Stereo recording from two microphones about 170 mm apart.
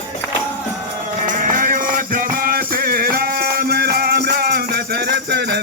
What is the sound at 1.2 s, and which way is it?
Music, 50° right (ahead or behind).